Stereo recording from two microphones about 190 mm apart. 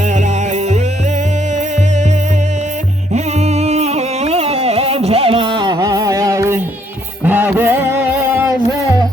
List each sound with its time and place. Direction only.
3.1 s music: 35° right (ahead or behind); by 8.5 s 15° right (ahead or behind)